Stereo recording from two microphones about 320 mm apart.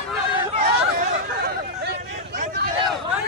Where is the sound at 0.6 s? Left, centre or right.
Right.